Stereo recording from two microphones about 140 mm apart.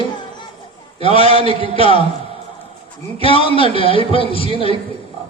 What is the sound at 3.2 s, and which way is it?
A man's voice, 40° left (ahead or behind).